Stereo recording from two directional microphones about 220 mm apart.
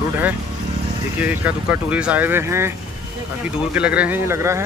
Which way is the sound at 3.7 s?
5° right (ahead or behind).